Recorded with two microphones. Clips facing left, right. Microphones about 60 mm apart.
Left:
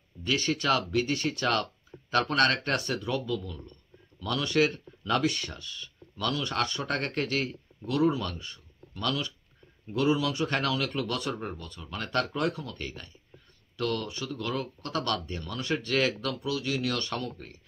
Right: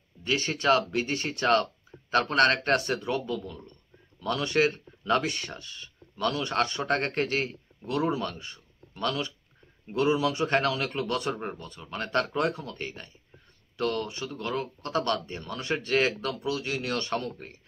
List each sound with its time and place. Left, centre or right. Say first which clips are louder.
0.2 s speech: right 1 dB; right